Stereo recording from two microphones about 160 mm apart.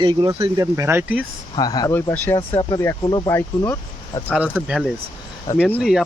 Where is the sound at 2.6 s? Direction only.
25° left (ahead or behind).